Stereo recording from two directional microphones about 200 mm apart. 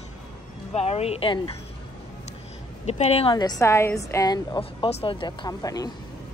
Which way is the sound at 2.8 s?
35° left (ahead or behind).